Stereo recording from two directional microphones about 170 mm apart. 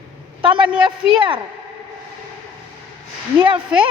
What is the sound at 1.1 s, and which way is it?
Speech, 30° right (ahead or behind).